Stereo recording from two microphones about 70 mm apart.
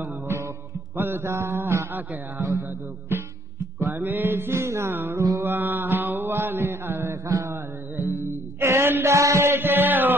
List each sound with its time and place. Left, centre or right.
0.0 s music: right
0.9 s mantra: right
3.8 s music: right
5.4 s mantra: right
8.0 s music: left
8.5 s a sound: right